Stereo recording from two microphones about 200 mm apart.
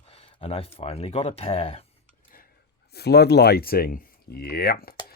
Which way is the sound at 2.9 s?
55° left (ahead or behind).